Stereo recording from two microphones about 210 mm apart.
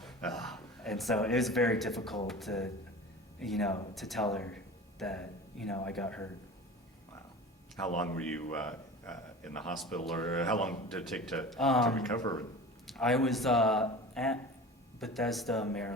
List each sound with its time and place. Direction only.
0.0 s a sound: centre (ahead or behind)
2.2 s speech: centre (ahead or behind)
8.0 s speech: 5° left (ahead or behind)
12.2 s speech: 15° left (ahead or behind)
12.9 s speech: centre (ahead or behind)